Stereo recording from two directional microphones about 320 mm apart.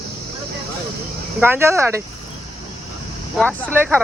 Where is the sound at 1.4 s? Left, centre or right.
Centre.